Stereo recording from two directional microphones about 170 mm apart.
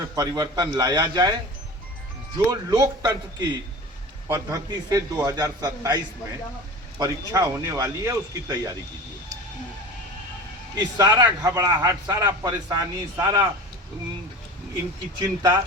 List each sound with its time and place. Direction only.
0.2 s speech: 20° right (ahead or behind)
2.5 s speech: 20° right (ahead or behind)
7.0 s speech: 20° right (ahead or behind)
10.8 s speech: 25° right (ahead or behind)
15.2 s speech: 20° right (ahead or behind)